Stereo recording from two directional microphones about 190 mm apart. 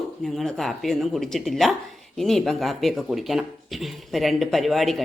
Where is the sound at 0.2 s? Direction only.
Centre (ahead or behind).